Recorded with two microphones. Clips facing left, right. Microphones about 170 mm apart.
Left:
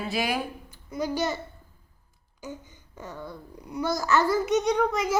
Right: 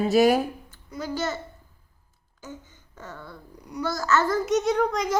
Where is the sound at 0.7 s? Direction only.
15° left (ahead or behind).